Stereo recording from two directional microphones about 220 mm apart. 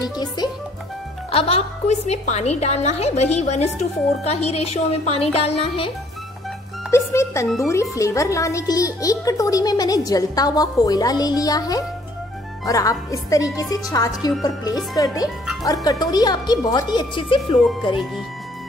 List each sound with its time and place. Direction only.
0.0 s a woman's voice: 15° left (ahead or behind)
6.9 s speech: 10° left (ahead or behind)